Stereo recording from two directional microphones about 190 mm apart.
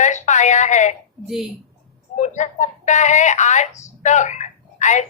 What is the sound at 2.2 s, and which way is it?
A man's voice, 40° left (ahead or behind).